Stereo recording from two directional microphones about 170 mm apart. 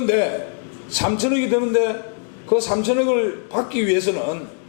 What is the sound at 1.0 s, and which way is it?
A man's voice, 15° left (ahead or behind).